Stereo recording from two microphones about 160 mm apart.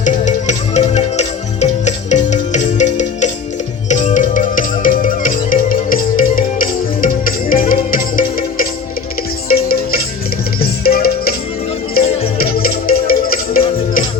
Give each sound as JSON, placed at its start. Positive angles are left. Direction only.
{"t": 0.0, "sound": "music", "side_deg": 50}
{"t": 12.4, "sound": "music", "side_deg": 65}